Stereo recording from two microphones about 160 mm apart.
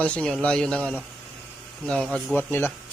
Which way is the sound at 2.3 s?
15° left (ahead or behind).